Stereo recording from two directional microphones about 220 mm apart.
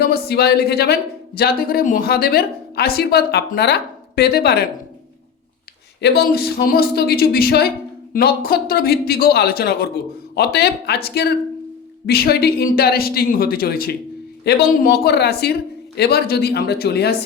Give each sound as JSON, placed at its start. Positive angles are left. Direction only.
{"t": 0.0, "sound": "a woman's voice", "side_deg": 45}
{"t": 6.0, "sound": "a woman's voice", "side_deg": 45}